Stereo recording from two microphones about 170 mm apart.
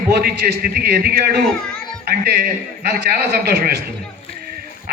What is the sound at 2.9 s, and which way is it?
Speech, 70° right (ahead or behind).